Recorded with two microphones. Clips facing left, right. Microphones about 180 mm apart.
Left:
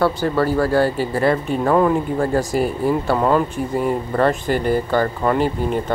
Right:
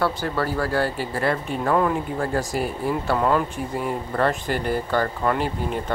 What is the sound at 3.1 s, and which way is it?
Speech, 30° left (ahead or behind).